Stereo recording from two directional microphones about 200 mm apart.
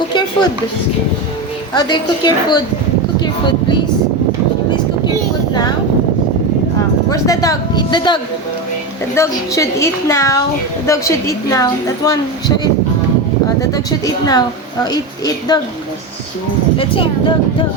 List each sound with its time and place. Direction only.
1.7 s speech: 20° left (ahead or behind)
7.1 s a woman's voice: 15° left (ahead or behind)
16.7 s speech: 25° left (ahead or behind)